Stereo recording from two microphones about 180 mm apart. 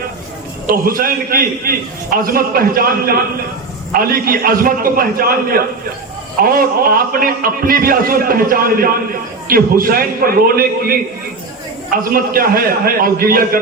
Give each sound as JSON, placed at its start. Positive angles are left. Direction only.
{"t": 0.7, "sound": "a man's voice", "side_deg": -50}
{"t": 3.9, "sound": "a man's voice", "side_deg": -55}
{"t": 12.1, "sound": "a man's voice", "side_deg": -55}